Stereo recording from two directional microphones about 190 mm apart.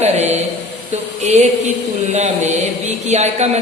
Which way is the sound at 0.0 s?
35° right (ahead or behind).